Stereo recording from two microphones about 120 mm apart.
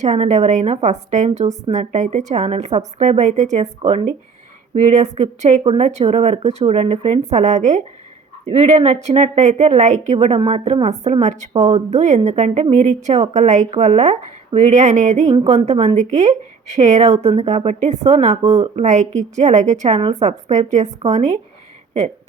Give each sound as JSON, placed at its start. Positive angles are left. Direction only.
{"t": 0.0, "sound": "a woman's voice", "side_deg": -75}
{"t": 1.7, "sound": "a woman's voice", "side_deg": -80}
{"t": 4.8, "sound": "a woman's voice", "side_deg": -85}
{"t": 12.7, "sound": "a woman's voice", "side_deg": -80}
{"t": 13.7, "sound": "a woman's voice", "side_deg": -65}
{"t": 15.4, "sound": "a woman's voice", "side_deg": -65}